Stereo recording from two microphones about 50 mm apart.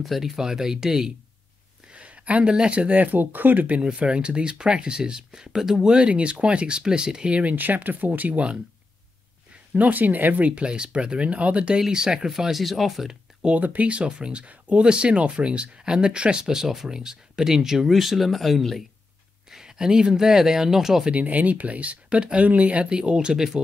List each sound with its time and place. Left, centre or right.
0.0 s speech: centre
1.9 s a sound: right
2.5 s speech: centre; by 3.6 s right
3.8 s speech: right
7.5 s speech: right
9.8 s speech: right
11.8 s speech: centre
13.6 s speech: right; by 18.9 s centre
19.5 s speech: centre
21.1 s speech: right; by 23.6 s centre